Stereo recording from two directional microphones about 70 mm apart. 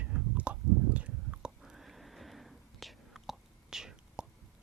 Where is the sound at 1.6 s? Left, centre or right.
Centre.